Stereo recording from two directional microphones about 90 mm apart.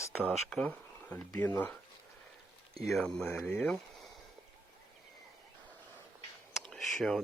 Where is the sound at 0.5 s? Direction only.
10° left (ahead or behind).